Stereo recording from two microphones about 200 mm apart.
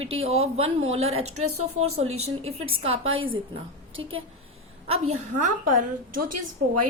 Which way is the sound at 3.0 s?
85° right.